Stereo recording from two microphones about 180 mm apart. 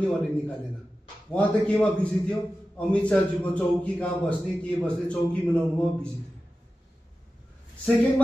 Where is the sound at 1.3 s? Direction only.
5° left (ahead or behind).